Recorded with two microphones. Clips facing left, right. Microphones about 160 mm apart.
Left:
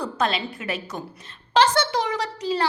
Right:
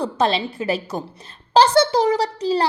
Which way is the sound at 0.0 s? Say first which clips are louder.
Right 5 dB; 30° right (ahead or behind).